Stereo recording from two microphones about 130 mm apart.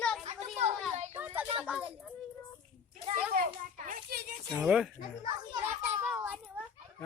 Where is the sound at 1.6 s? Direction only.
5° right (ahead or behind).